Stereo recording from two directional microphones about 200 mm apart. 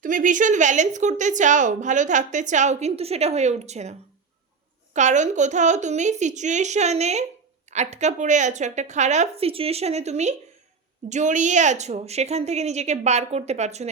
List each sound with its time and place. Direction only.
0.0 s a woman's voice: 40° right (ahead or behind)
4.9 s a woman's voice: 35° right (ahead or behind)